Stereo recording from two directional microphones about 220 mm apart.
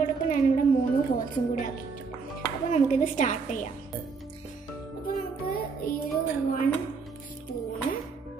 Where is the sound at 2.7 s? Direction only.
35° left (ahead or behind).